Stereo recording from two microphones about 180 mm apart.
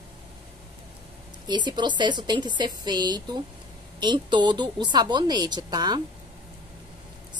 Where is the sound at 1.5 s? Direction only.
25° right (ahead or behind).